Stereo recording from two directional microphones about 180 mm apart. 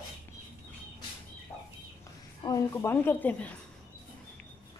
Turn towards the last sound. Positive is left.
turn(degrees=10)  # may be behind; listen again after turning